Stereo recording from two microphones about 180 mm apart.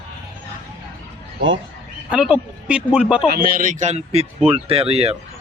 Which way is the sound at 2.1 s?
5° right (ahead or behind).